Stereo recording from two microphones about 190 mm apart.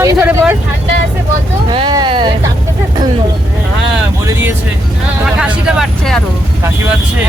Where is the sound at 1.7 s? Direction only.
25° right (ahead or behind).